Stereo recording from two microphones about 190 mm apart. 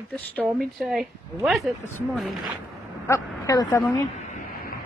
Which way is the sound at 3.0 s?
15° left (ahead or behind).